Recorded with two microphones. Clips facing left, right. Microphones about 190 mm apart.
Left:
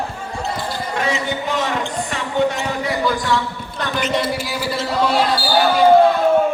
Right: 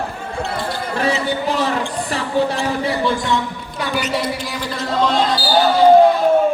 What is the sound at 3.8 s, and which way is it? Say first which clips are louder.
Speech: even; 10° right (ahead or behind).